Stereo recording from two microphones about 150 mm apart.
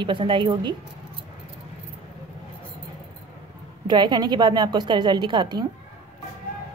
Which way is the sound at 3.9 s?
30° right (ahead or behind).